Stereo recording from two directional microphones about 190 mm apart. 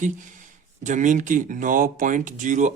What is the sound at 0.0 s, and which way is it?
Speech, 40° right (ahead or behind).